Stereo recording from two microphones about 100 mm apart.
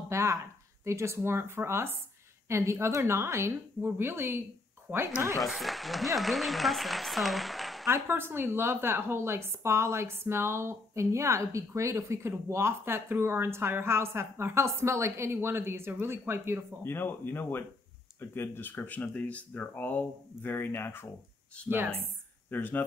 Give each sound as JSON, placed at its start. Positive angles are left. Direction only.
{"t": 0.1, "sound": "a woman's voice", "side_deg": -30}
{"t": 5.4, "sound": "speech", "side_deg": 0}
{"t": 7.9, "sound": "a woman's voice", "side_deg": -25}
{"t": 16.8, "sound": "speech", "side_deg": 20}
{"t": 21.6, "sound": "a woman's voice", "side_deg": -20}
{"t": 22.5, "sound": "speech", "side_deg": 20}